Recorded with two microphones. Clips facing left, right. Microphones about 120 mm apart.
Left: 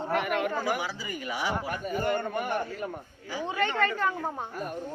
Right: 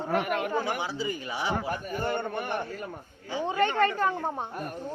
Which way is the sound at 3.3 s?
25° right (ahead or behind).